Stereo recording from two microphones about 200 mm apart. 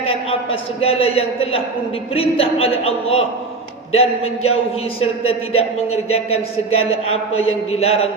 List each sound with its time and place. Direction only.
0.0 s a sound: 30° left (ahead or behind)
0.8 s speech: 30° left (ahead or behind)
5.5 s speech: 30° left (ahead or behind)
7.7 s speech: 30° left (ahead or behind)